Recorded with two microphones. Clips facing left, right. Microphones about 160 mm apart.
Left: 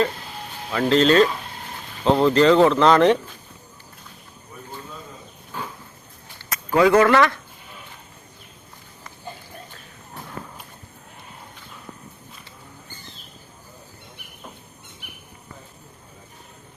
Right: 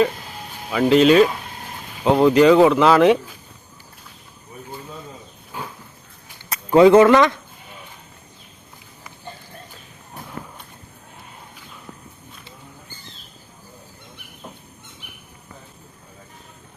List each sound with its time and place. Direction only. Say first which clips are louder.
0.7 s speech: right 3 dB; 10° right (ahead or behind)
6.5 s speech: right 5 dB; 25° right (ahead or behind)